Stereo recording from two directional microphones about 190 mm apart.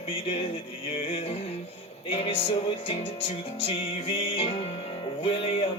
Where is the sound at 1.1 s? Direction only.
30° left (ahead or behind).